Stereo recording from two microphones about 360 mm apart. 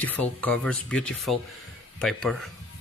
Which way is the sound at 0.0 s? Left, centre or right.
Centre.